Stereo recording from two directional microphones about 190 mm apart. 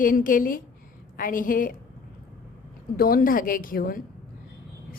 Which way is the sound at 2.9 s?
50° left (ahead or behind).